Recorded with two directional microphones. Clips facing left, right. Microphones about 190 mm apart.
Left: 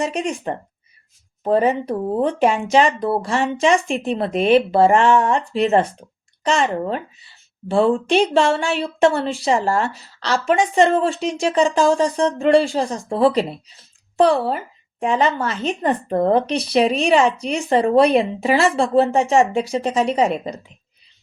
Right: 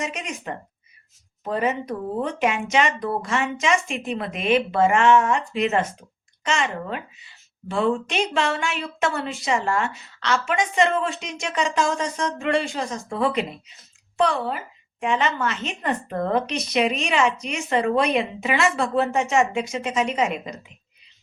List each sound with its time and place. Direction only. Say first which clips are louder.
0.0 s a woman's voice: left 8 dB; 30° left (ahead or behind)